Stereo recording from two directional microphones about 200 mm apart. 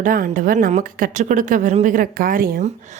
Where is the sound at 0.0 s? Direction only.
40° right (ahead or behind).